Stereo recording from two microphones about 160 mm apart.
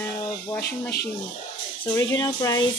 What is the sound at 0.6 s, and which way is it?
Speech, 80° left.